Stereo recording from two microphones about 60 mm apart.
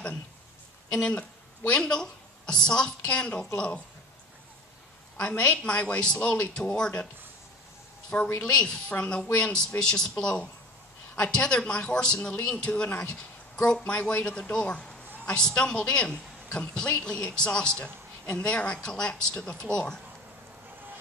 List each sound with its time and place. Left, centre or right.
1.7 s a woman's voice: centre
5.1 s a woman's voice: centre
8.4 s a woman's voice: centre